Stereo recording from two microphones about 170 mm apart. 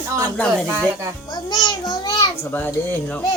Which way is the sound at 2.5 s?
10° left (ahead or behind).